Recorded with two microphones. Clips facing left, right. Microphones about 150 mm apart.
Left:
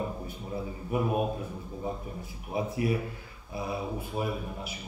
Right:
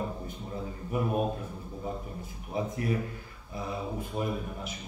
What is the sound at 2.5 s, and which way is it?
A man's voice, 10° left (ahead or behind).